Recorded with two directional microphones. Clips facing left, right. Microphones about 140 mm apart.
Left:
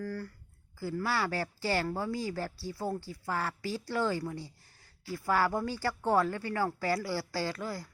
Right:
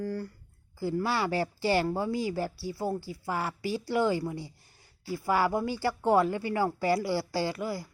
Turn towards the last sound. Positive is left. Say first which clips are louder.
# right 4 dB
turn(degrees=-10)  # may be behind; listen again after turning